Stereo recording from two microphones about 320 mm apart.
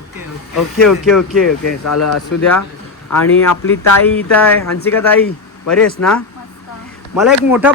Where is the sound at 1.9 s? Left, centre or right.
Left.